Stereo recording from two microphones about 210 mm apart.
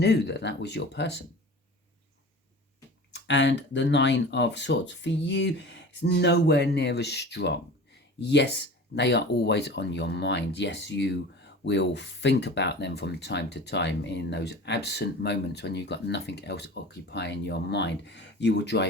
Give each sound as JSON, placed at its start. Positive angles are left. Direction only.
{"t": 0.0, "sound": "speech", "side_deg": 55}
{"t": 3.1, "sound": "speech", "side_deg": 60}